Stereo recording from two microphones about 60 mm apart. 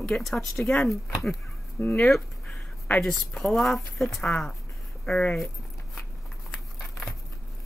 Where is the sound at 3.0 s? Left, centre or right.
Centre.